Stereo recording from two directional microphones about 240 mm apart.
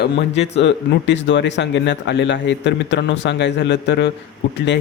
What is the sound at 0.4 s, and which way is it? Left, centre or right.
Speech, left.